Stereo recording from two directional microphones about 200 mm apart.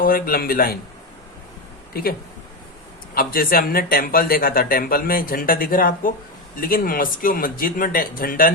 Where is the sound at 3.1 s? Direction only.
45° left (ahead or behind).